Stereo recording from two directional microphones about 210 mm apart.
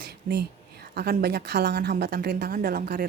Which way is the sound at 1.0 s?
50° right (ahead or behind).